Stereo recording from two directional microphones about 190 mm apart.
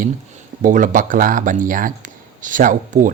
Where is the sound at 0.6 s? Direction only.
45° right (ahead or behind).